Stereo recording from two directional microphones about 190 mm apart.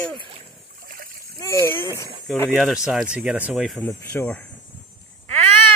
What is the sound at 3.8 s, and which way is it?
Speech, 10° left (ahead or behind).